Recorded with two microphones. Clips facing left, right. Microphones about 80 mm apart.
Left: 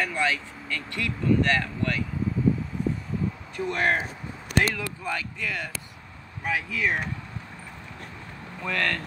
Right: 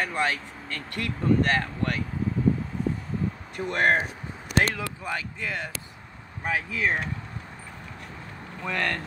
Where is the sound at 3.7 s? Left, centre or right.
Right.